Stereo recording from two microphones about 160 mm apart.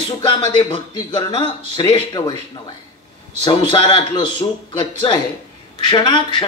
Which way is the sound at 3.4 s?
30° left (ahead or behind).